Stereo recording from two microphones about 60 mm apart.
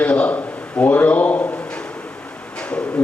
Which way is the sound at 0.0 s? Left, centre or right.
Left.